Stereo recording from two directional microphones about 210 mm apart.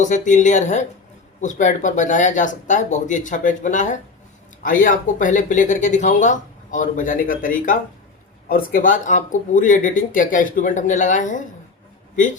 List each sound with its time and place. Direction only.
0.0 s speech: 35° left (ahead or behind)